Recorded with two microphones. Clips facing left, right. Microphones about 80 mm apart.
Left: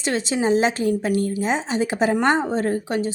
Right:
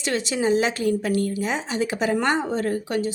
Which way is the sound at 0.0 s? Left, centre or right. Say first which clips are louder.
Left 2 dB; left.